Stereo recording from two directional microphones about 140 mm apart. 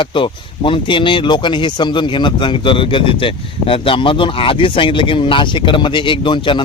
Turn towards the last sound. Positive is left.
turn(degrees=35)  # may be behind; listen again after turning